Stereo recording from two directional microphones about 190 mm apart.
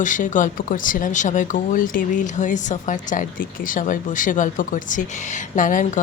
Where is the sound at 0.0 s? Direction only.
40° left (ahead or behind).